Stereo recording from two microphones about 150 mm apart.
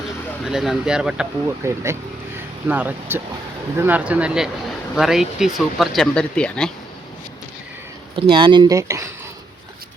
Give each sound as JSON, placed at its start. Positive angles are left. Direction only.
{"t": 0.4, "sound": "speech", "side_deg": -5}
{"t": 1.6, "sound": "speech", "side_deg": -20}
{"t": 8.1, "sound": "speech", "side_deg": -35}